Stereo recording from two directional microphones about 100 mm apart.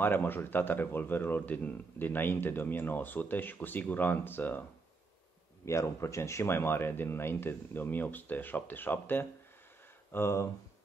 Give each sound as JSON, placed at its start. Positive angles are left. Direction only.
{"t": 0.0, "sound": "speech", "side_deg": 20}
{"t": 5.7, "sound": "speech", "side_deg": 30}